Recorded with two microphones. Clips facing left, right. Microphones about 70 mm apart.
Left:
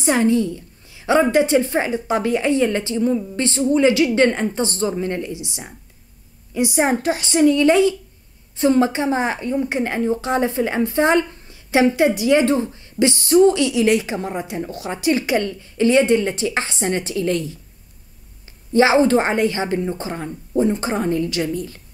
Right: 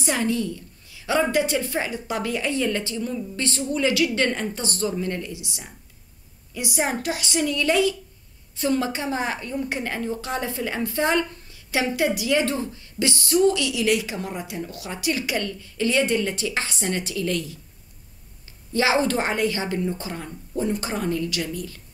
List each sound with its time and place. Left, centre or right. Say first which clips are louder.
0.0 s a woman's voice: left 7 dB; left
18.7 s a woman's voice: left 7 dB; left